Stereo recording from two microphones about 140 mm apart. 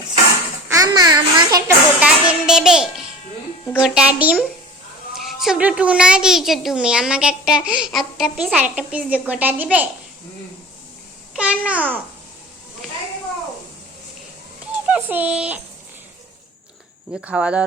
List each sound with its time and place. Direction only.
0.7 s a child's voice: 25° right (ahead or behind)
2.0 s a woman's voice: 5° right (ahead or behind)
11.3 s a woman's voice: 10° right (ahead or behind)
14.9 s a woman's voice: 10° right (ahead or behind)
17.2 s a woman's voice: 10° right (ahead or behind)